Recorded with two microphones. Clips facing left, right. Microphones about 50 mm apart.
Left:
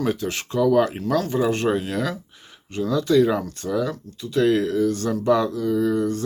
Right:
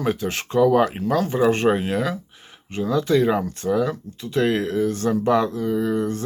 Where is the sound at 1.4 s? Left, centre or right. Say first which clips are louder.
Right 3 dB; right.